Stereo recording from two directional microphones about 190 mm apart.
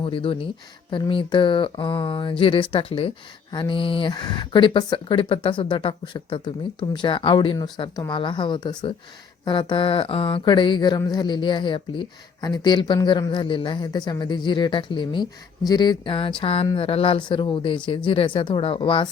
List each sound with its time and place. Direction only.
0.0 s speech: 30° left (ahead or behind)